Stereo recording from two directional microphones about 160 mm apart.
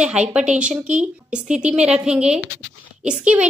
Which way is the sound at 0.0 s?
5° right (ahead or behind).